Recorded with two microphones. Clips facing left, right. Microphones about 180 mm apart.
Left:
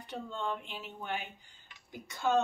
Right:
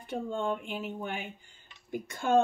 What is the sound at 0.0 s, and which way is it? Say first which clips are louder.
Speech: right 6 dB; 45° right (ahead or behind).